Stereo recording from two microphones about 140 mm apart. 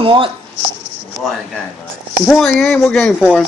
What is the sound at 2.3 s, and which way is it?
Speech, 5° left (ahead or behind).